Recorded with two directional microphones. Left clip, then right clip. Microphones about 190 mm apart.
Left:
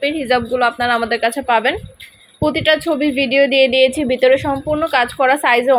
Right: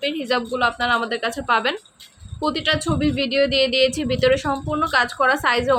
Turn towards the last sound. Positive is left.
turn(degrees=10)  # may be behind; listen again after turning